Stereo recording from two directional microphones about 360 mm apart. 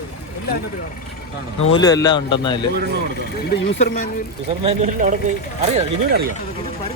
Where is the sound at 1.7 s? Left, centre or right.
Centre.